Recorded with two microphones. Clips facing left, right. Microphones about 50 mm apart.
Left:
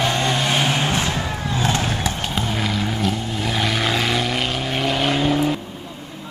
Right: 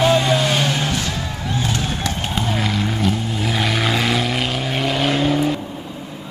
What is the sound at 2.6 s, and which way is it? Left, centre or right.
Vehicle, centre.